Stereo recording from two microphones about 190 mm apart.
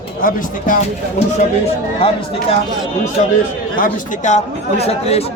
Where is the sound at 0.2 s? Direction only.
45° left (ahead or behind).